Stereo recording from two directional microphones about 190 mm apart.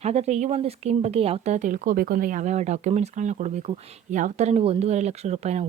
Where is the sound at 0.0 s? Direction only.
35° right (ahead or behind).